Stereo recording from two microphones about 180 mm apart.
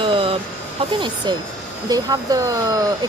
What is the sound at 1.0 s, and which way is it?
Speech, 25° right (ahead or behind).